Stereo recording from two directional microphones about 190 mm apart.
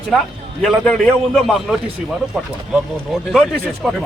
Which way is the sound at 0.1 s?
5° left (ahead or behind).